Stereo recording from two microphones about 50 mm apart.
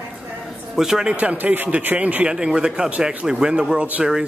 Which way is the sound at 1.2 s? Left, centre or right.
Right.